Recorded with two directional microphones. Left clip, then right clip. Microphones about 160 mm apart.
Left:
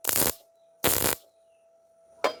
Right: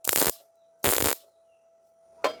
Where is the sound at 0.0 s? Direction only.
Centre (ahead or behind).